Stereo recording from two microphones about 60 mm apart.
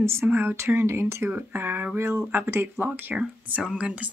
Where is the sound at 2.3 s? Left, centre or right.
Right.